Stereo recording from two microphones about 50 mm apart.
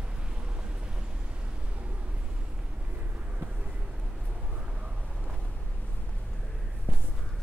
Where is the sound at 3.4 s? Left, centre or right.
Centre.